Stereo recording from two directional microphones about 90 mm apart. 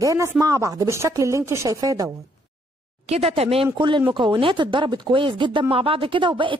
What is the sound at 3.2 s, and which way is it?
Speech, 90° right.